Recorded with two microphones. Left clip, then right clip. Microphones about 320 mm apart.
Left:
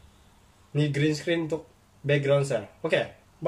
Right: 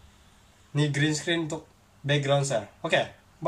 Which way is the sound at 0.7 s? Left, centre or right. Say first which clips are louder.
Left 1 dB; right.